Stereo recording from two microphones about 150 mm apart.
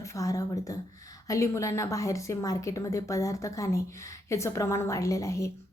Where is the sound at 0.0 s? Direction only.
20° left (ahead or behind).